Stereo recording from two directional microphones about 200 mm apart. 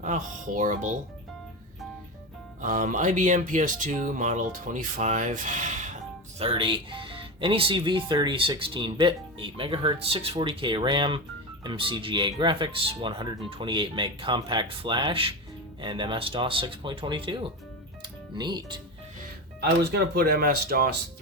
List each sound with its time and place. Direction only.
0.0 s speech: 40° right (ahead or behind)
2.6 s speech: 40° right (ahead or behind)
6.4 s speech: 25° right (ahead or behind)
18.0 s music: 20° right (ahead or behind)
19.9 s speech: 50° right (ahead or behind)